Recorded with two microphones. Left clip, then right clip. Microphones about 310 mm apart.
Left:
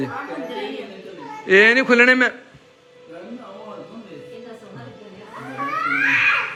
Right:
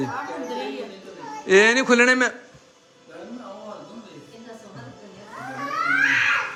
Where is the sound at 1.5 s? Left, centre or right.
Centre.